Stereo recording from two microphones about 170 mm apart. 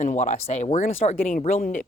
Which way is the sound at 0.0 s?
45° left (ahead or behind).